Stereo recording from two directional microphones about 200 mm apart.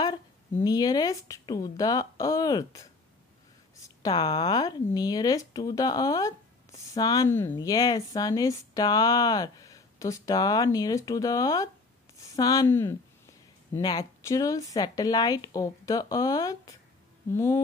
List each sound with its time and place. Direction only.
0.0 s speech: 20° left (ahead or behind)